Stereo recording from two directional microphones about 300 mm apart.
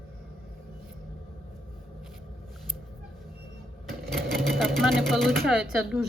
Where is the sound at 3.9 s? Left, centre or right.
Centre.